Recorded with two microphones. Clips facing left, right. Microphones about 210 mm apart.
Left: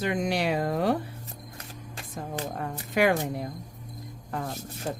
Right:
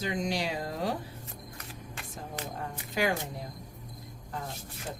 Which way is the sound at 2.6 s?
60° left (ahead or behind).